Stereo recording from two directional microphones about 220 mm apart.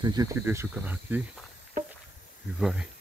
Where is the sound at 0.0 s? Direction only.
15° right (ahead or behind).